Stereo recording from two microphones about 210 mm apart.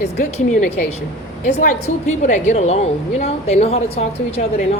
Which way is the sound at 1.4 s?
35° left (ahead or behind).